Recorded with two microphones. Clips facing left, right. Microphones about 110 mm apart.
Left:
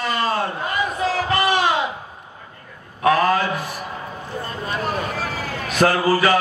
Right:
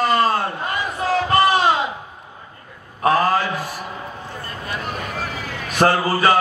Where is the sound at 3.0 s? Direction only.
35° right (ahead or behind).